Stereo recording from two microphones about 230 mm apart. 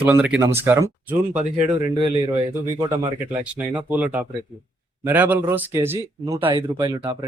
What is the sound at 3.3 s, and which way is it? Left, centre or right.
Speech, centre.